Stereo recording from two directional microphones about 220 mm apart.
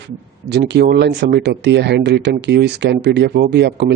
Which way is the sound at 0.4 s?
50° right (ahead or behind).